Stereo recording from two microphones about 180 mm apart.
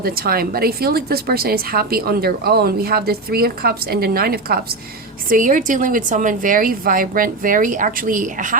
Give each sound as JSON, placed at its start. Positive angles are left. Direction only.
{"t": 0.0, "sound": "a woman's voice", "side_deg": -55}